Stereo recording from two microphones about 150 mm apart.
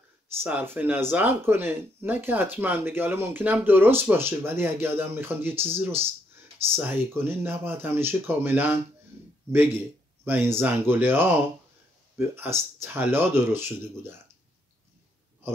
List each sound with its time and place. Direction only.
0.4 s speech: 10° right (ahead or behind)
10.2 s speech: 15° right (ahead or behind)